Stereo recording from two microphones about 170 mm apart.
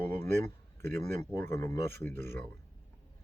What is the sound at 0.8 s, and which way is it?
Speech, 15° left (ahead or behind).